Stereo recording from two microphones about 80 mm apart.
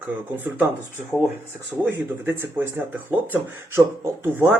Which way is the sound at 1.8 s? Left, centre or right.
Right.